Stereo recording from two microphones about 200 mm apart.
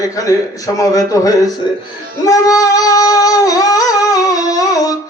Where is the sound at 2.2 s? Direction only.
15° left (ahead or behind).